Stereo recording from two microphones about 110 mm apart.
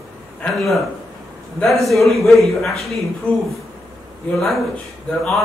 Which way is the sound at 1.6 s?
Centre (ahead or behind).